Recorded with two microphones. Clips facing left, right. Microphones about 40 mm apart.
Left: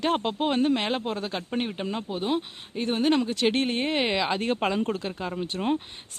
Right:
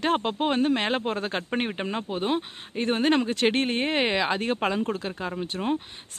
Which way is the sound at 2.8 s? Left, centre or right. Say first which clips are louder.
Right 1 dB; right.